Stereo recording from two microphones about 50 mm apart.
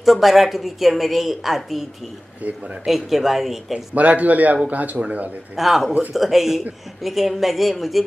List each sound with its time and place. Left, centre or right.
0.0 s a woman's voice: centre
2.4 s speech: right
2.8 s a woman's voice: centre
3.9 s speech: right
5.6 s a woman's voice: centre